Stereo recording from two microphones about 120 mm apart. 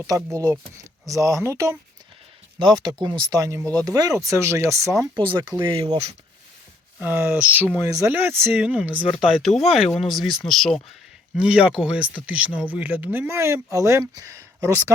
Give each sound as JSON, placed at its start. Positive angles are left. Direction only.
{"t": 0.3, "sound": "speech", "side_deg": -25}
{"t": 2.6, "sound": "speech", "side_deg": -35}
{"t": 7.0, "sound": "speech", "side_deg": -15}
{"t": 7.9, "sound": "speech", "side_deg": -25}
{"t": 11.3, "sound": "speech", "side_deg": -10}